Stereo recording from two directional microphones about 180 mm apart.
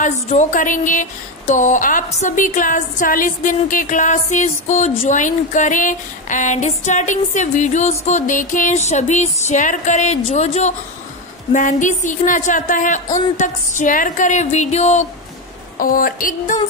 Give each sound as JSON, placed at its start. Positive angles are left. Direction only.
{"t": 0.0, "sound": "a woman's voice", "side_deg": 45}
{"t": 15.8, "sound": "a woman's voice", "side_deg": 50}